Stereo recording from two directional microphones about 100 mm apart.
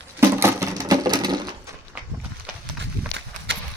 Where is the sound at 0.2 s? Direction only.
25° right (ahead or behind); by 1.4 s 45° right (ahead or behind).